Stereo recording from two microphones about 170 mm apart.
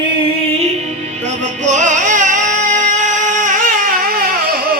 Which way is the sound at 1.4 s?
45° right (ahead or behind).